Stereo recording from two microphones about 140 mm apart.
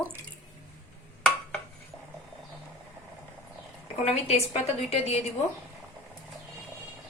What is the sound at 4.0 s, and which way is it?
A woman's voice, 45° left (ahead or behind).